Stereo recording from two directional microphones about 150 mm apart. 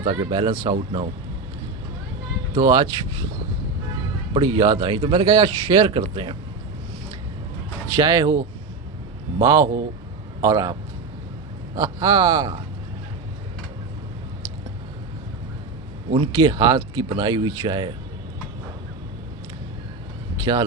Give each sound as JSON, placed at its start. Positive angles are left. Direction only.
{"t": 0.0, "sound": "speech", "side_deg": -35}
{"t": 2.6, "sound": "speech", "side_deg": -30}
{"t": 4.4, "sound": "speech", "side_deg": -30}
{"t": 7.9, "sound": "speech", "side_deg": -25}
{"t": 9.4, "sound": "speech", "side_deg": -25}
{"t": 16.1, "sound": "speech", "side_deg": -30}
{"t": 20.4, "sound": "speech", "side_deg": -30}